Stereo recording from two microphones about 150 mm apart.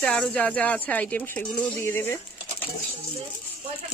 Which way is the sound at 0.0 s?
5° left (ahead or behind).